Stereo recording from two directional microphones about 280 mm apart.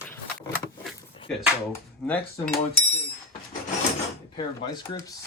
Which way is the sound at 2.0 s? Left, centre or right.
Centre.